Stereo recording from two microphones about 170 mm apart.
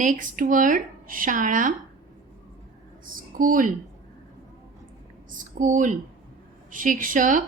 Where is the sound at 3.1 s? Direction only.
55° right (ahead or behind).